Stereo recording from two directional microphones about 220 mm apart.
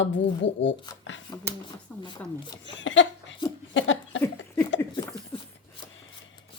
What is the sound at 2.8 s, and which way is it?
Chuckle, 55° left (ahead or behind).